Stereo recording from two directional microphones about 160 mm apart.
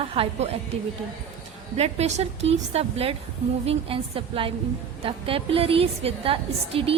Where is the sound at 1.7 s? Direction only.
40° right (ahead or behind).